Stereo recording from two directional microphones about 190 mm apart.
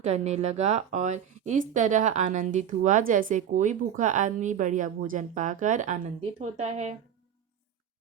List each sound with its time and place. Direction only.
0.0 s speech: 35° right (ahead or behind)